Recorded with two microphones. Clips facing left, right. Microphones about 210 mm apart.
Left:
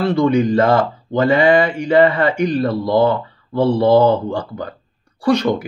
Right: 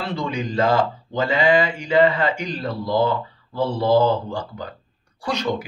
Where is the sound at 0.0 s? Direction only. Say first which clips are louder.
Left 11 dB; 55° left (ahead or behind).